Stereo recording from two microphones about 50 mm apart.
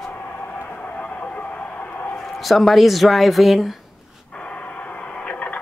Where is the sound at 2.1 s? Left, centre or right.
Centre.